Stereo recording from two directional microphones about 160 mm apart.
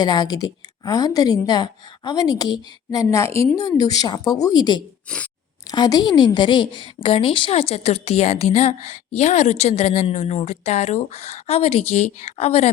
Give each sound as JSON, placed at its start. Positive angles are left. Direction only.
{"t": 0.0, "sound": "a woman's voice", "side_deg": 25}
{"t": 5.0, "sound": "scissors", "side_deg": 5}
{"t": 5.7, "sound": "a woman's voice", "side_deg": 25}